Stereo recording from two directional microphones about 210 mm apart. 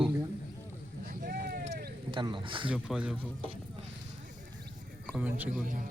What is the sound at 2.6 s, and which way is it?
Speech, 5° right (ahead or behind).